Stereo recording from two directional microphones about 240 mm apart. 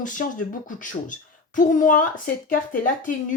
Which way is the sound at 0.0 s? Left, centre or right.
Left.